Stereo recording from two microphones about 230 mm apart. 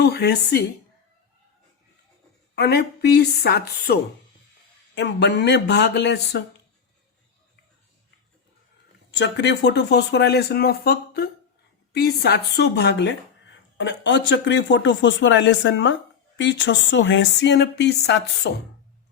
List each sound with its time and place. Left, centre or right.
0.0 s speech: left
2.6 s speech: left
4.9 s speech: left
9.1 s speech: left